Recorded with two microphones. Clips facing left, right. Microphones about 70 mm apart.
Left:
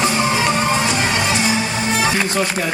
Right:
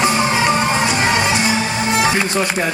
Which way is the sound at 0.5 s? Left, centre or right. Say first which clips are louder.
Right 1 dB; centre.